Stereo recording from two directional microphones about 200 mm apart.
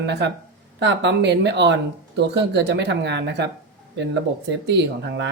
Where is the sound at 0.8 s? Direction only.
60° right (ahead or behind).